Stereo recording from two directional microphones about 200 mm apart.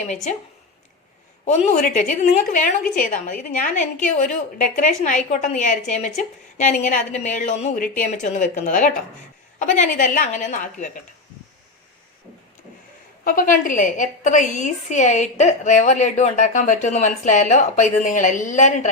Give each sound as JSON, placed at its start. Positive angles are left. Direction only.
{"t": 1.5, "sound": "a woman's voice", "side_deg": 40}
{"t": 13.2, "sound": "a woman's voice", "side_deg": 40}